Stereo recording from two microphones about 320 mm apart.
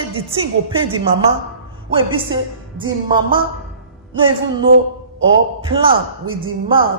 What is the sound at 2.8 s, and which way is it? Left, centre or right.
Speech, centre.